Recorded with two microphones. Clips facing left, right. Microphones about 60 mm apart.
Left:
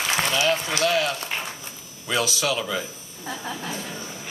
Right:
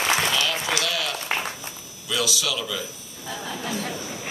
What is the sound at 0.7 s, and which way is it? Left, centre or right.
A man's voice, left.